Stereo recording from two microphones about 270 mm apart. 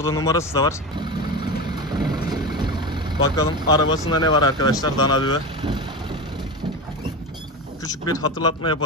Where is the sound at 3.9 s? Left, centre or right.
Left.